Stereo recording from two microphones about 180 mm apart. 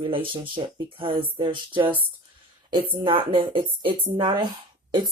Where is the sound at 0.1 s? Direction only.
30° right (ahead or behind).